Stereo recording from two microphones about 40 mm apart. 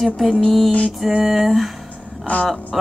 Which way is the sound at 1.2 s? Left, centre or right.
Centre.